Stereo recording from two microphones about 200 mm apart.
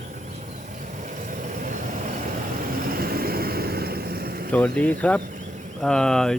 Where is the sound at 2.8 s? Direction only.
45° right (ahead or behind).